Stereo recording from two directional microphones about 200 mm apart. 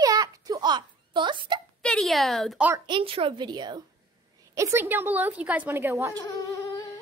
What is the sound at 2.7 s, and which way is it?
A woman's voice, 25° right (ahead or behind).